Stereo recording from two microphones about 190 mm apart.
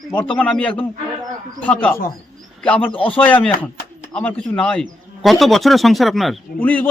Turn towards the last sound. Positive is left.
turn(degrees=10)  # may be behind; listen again after turning